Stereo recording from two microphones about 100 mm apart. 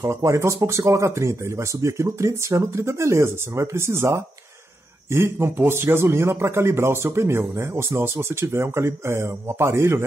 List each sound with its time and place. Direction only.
0.0 s a man's voice: 30° right (ahead or behind)